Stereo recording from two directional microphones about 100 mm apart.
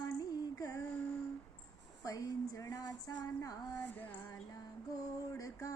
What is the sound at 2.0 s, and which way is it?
Music, 35° left (ahead or behind).